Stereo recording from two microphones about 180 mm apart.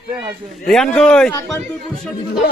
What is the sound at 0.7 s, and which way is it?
Speech, 5° left (ahead or behind).